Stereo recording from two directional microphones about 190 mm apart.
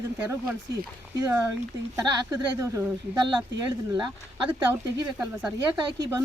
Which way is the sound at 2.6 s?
15° right (ahead or behind).